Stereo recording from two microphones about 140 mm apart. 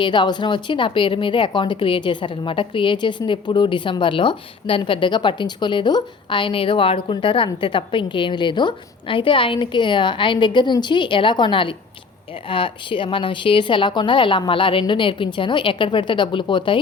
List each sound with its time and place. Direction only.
0.0 s a woman's voice: 35° left (ahead or behind)